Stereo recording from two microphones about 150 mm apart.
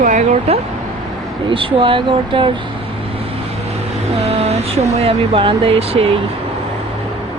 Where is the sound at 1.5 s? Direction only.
35° right (ahead or behind).